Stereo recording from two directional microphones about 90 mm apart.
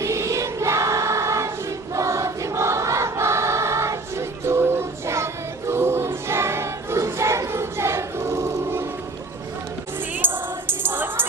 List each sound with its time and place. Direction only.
0.0 s choir: 35° right (ahead or behind)
10.2 s music: 25° right (ahead or behind)